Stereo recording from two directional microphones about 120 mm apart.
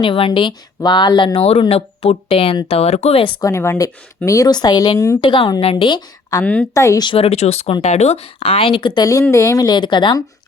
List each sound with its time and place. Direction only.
0.0 s speech: 45° left (ahead or behind)
3.4 s a woman's voice: 20° left (ahead or behind)
5.2 s speech: 45° left (ahead or behind)
5.7 s a woman's voice: 40° left (ahead or behind)
6.4 s a woman's voice: 10° left (ahead or behind)
6.7 s speech: 30° left (ahead or behind)
7.1 s speech: 55° left (ahead or behind)
9.0 s a woman's voice: 30° left (ahead or behind)